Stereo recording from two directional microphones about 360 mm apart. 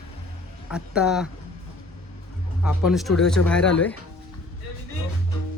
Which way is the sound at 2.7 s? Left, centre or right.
Centre.